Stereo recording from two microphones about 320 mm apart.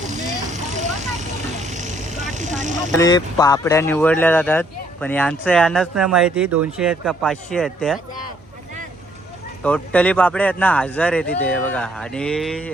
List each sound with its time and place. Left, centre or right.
0.1 s vehicle: right
2.9 s speech: centre
9.6 s speech: centre